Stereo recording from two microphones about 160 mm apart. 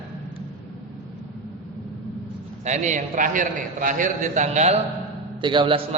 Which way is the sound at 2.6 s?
45° right (ahead or behind).